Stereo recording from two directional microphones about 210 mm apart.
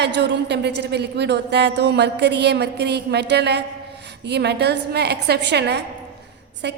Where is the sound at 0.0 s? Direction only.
55° right (ahead or behind).